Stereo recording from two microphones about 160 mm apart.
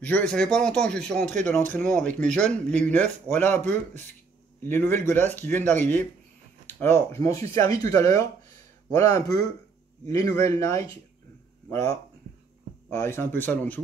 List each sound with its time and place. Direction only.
0.0 s speech: 10° left (ahead or behind)
4.6 s speech: 15° left (ahead or behind)
12.9 s speech: 15° left (ahead or behind)